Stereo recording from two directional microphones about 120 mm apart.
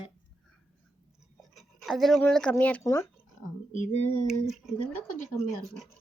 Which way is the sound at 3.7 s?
75° left (ahead or behind).